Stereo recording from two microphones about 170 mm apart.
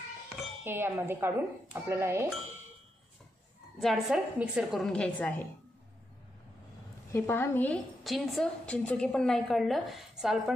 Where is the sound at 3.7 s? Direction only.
Centre (ahead or behind).